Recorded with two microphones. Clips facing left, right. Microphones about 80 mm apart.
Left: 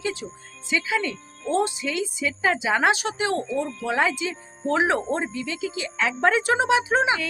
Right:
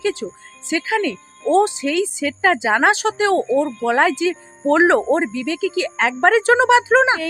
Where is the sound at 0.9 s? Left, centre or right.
Right.